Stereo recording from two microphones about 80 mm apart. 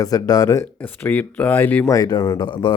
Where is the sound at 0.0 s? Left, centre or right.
Left.